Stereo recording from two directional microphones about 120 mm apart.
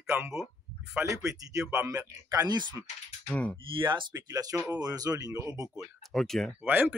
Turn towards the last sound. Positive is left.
turn(degrees=-15)  # may be behind; listen again after turning